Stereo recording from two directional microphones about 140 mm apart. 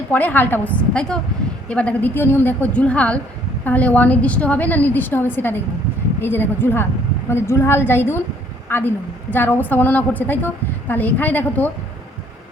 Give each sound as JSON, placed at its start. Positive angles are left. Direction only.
{"t": 0.1, "sound": "a woman's voice", "side_deg": 15}